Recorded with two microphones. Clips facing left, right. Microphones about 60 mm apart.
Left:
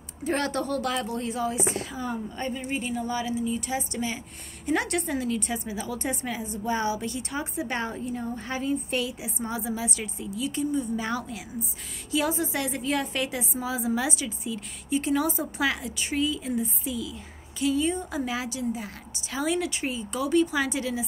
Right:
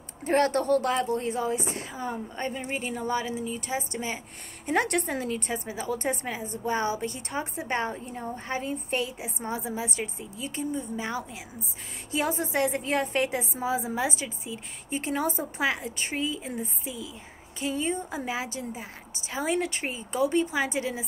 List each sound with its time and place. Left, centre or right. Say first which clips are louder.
0.2 s a woman's voice: right 4 dB; right
4.6 s a woman's voice: right 1 dB; right
11.0 s a woman's voice: left 2 dB; centre
12.1 s a woman's voice: left 1 dB; right